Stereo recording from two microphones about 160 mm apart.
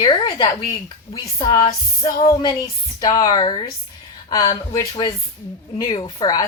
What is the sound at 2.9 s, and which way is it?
Speech, 25° left (ahead or behind).